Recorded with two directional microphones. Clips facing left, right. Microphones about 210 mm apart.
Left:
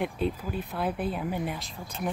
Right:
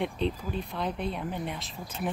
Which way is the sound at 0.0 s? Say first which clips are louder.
Left 1 dB; 5° left (ahead or behind).